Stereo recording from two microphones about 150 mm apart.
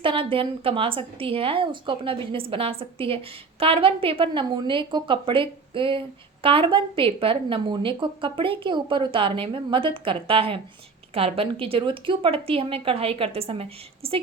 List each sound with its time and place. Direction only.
0.0 s a woman's voice: 35° right (ahead or behind)